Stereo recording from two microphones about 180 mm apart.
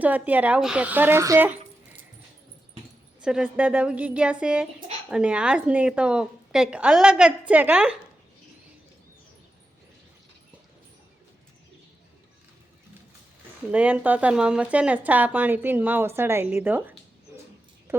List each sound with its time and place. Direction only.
0.0 s speech: 10° right (ahead or behind)
3.2 s speech: 5° right (ahead or behind)
13.7 s speech: 10° right (ahead or behind)